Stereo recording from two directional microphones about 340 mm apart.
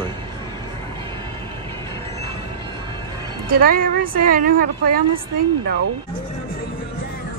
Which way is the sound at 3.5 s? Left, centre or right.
Right.